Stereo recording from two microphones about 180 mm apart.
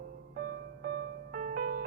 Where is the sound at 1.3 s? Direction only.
50° right (ahead or behind).